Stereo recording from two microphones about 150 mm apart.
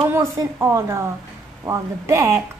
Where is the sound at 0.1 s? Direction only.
15° right (ahead or behind).